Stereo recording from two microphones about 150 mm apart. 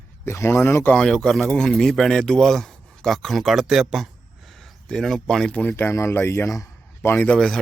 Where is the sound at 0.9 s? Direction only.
5° left (ahead or behind).